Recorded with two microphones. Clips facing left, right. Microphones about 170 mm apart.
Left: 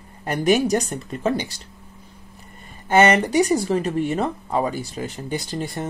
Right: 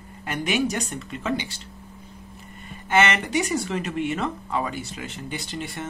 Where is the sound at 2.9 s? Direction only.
40° left (ahead or behind).